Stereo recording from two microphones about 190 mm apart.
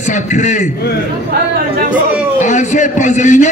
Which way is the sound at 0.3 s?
40° left (ahead or behind).